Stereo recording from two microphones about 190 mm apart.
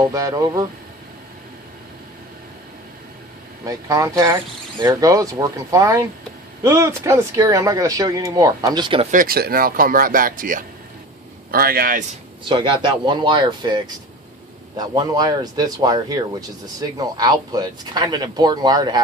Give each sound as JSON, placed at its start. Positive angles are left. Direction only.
{"t": 0.0, "sound": "speech", "side_deg": -20}
{"t": 3.7, "sound": "speech", "side_deg": -15}
{"t": 9.1, "sound": "speech", "side_deg": -50}
{"t": 12.5, "sound": "speech", "side_deg": -25}